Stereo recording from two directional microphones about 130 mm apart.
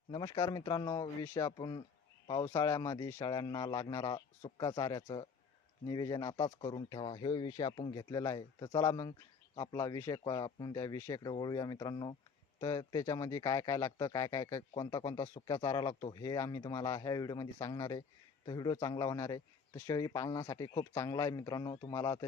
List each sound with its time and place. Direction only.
0.1 s speech: 35° left (ahead or behind)
2.4 s a man's voice: 25° left (ahead or behind)